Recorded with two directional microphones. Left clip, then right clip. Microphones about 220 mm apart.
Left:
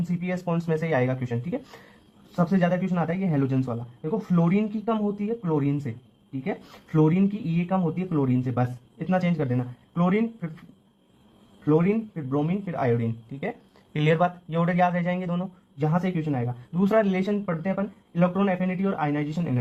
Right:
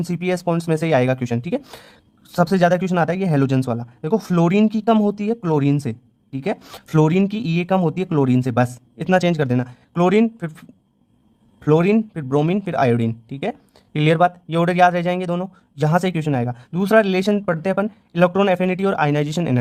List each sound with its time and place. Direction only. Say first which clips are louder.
0.1 s speech: right 10 dB; 35° right (ahead or behind)
11.6 s speech: right 7 dB; 40° right (ahead or behind)